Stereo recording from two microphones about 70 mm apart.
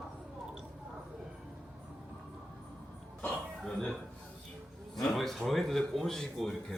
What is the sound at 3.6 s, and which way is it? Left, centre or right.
Speech, centre.